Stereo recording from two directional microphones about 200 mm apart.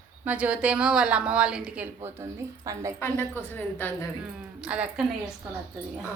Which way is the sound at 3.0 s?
10° left (ahead or behind).